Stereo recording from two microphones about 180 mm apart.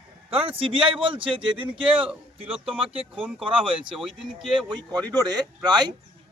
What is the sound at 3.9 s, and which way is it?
Speech, centre (ahead or behind).